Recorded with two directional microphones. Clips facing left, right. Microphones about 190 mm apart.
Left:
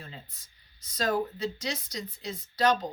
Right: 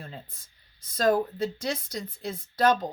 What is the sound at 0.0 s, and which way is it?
Speech, 50° right (ahead or behind).